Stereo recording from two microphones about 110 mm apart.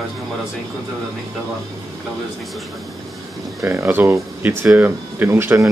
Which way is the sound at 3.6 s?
20° right (ahead or behind).